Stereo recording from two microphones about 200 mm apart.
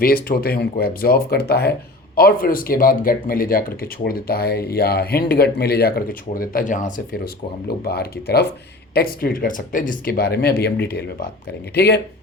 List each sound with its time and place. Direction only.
0.0 s speech: 50° left (ahead or behind)
7.7 s speech: 50° left (ahead or behind)